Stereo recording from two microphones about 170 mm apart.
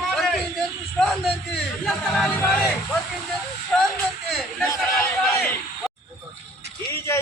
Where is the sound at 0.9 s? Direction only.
Centre (ahead or behind).